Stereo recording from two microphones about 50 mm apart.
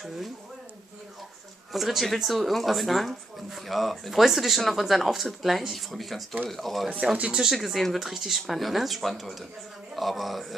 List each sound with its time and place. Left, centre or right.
1.7 s speech: centre
7.2 s speech: right
7.4 s speech: centre